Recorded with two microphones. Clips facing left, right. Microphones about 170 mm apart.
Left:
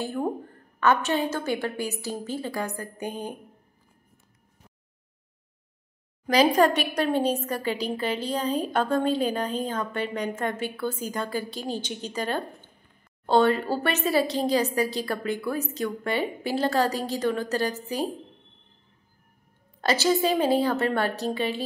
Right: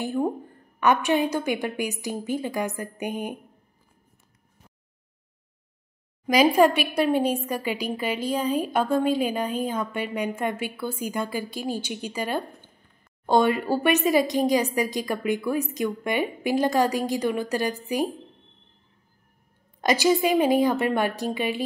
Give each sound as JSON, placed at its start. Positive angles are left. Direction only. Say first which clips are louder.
{"t": 0.0, "sound": "a woman's voice", "louder": "right 2 dB", "side_deg": -15}
{"t": 6.2, "sound": "a woman's voice", "louder": "right 2 dB", "side_deg": -10}
{"t": 19.8, "sound": "a woman's voice", "louder": "right 2 dB", "side_deg": -15}